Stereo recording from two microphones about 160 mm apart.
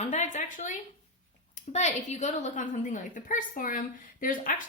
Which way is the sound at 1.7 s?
45° left (ahead or behind).